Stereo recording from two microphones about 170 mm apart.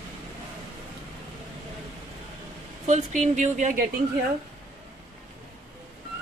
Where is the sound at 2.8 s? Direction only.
45° right (ahead or behind).